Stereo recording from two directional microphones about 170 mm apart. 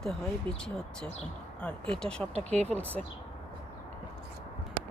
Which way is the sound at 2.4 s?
40° right (ahead or behind).